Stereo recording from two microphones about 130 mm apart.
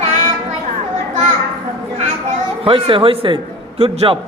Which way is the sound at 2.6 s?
45° right (ahead or behind).